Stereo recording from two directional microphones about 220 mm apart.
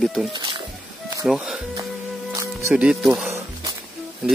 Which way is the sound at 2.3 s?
15° right (ahead or behind).